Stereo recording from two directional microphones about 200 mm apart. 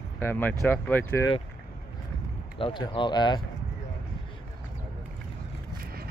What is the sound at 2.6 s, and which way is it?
Speech, 25° left (ahead or behind).